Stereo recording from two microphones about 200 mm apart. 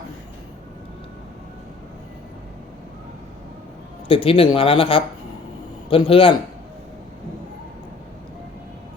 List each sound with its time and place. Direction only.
4.1 s speech: 25° left (ahead or behind)